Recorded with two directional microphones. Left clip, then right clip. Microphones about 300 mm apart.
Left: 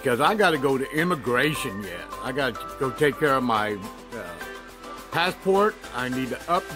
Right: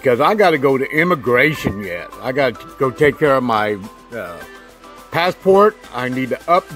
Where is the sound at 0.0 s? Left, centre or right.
Centre.